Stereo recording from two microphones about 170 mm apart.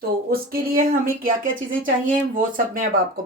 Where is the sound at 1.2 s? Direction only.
55° right (ahead or behind).